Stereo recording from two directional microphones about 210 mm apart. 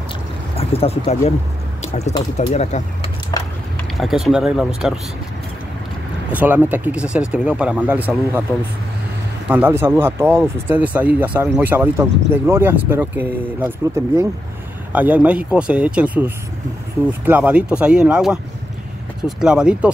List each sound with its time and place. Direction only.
0.6 s speech: 25° left (ahead or behind)
2.3 s speech: 30° left (ahead or behind)
3.3 s a sound: 15° left (ahead or behind)
4.0 s speech: centre (ahead or behind)
6.3 s speech: 10° right (ahead or behind)
9.5 s speech: 10° right (ahead or behind)